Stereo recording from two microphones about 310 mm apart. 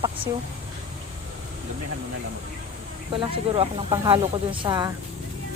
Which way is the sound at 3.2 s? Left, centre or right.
Centre.